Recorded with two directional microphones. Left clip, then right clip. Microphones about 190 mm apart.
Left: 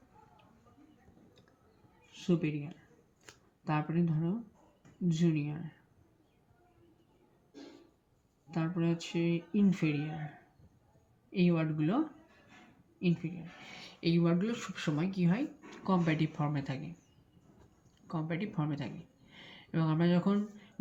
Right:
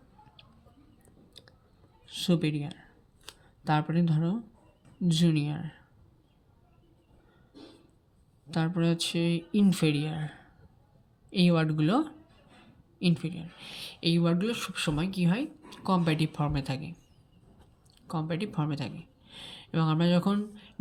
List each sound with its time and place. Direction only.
2.0 s speech: 60° right (ahead or behind)
8.4 s speech: 55° right (ahead or behind); by 16.9 s 40° right (ahead or behind)
18.1 s speech: 35° right (ahead or behind)